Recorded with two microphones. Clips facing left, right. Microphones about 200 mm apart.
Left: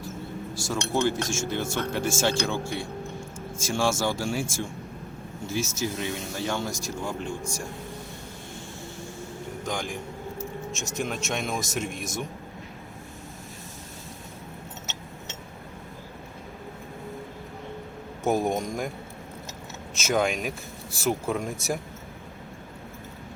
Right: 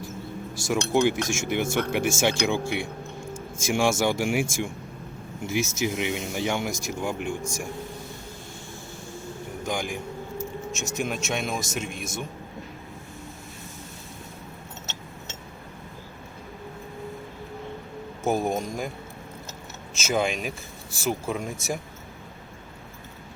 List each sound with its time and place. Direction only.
0.7 s speech: 15° right (ahead or behind)
9.6 s speech: 10° right (ahead or behind)
18.3 s speech: centre (ahead or behind)
20.0 s speech: centre (ahead or behind)